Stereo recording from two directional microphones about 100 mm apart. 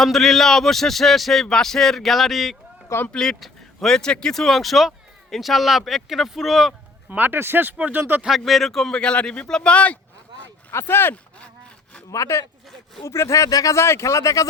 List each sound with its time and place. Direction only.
0.0 s speech: centre (ahead or behind)
7.1 s speech: 20° right (ahead or behind)
8.2 s speech: centre (ahead or behind)
10.4 s a sound: 25° left (ahead or behind)
12.1 s speech: 30° left (ahead or behind)